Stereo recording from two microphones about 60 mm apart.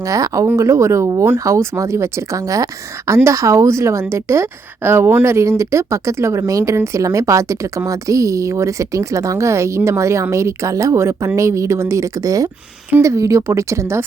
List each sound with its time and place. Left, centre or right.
0.0 s speech: right
0.5 s a woman's voice: right
6.7 s a woman's voice: right
13.0 s a woman's voice: right